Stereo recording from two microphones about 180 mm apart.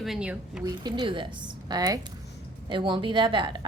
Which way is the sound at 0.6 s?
25° right (ahead or behind).